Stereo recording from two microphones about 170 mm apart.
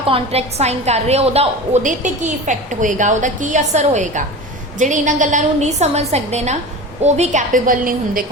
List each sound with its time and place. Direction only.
0.1 s a woman's voice: 35° right (ahead or behind); by 8.2 s 55° right (ahead or behind)